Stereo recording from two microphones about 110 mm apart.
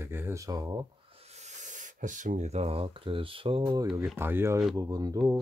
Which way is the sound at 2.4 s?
85° right.